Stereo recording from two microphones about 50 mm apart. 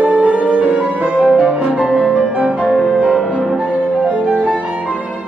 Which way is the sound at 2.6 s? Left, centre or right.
Left.